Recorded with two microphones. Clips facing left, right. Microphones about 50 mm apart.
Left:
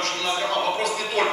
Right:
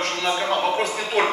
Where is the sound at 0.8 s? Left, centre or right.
Right.